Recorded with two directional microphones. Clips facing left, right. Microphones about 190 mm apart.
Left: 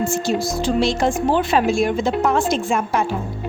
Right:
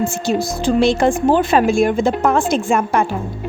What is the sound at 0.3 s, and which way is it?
A woman's voice, 60° right (ahead or behind).